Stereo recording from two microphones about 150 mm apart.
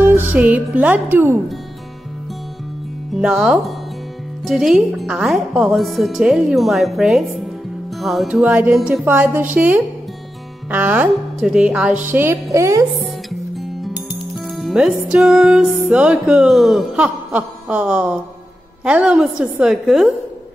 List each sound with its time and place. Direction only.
0.0 s music: 15° right (ahead or behind)
3.1 s a woman's voice: 5° right (ahead or behind); by 12.8 s 20° right (ahead or behind)
13.7 s music: centre (ahead or behind)
14.5 s a man's voice: centre (ahead or behind)